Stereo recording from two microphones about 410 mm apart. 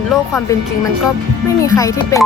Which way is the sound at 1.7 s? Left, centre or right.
Centre.